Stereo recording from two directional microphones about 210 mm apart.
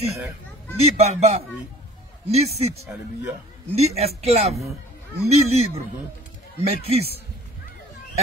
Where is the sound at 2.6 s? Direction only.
30° right (ahead or behind).